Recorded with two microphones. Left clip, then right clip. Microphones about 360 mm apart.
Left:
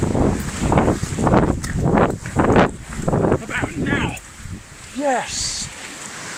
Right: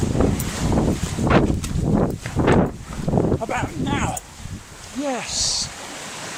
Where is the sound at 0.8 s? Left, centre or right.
Left.